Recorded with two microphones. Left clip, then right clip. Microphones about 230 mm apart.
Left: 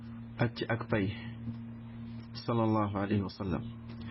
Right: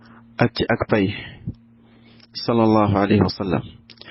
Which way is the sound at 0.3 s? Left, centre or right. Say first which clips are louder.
Right 14 dB; right.